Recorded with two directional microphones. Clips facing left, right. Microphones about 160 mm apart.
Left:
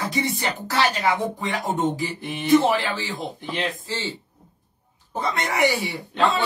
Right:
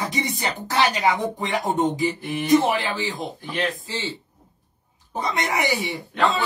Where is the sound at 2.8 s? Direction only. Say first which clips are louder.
Right 2 dB; 20° right (ahead or behind).